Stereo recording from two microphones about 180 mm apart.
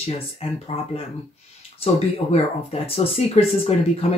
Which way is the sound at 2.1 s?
35° left (ahead or behind).